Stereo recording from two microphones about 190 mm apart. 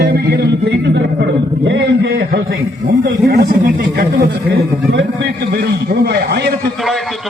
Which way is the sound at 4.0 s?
65° right (ahead or behind).